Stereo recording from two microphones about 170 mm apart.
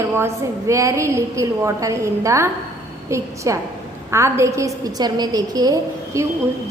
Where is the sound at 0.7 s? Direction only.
20° right (ahead or behind).